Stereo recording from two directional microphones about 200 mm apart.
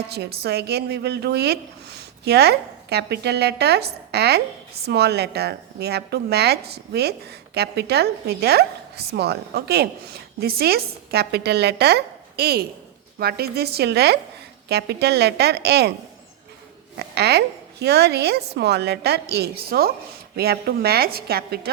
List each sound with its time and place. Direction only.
0.1 s a woman's voice: 55° right (ahead or behind)
17.0 s a woman's voice: 55° right (ahead or behind)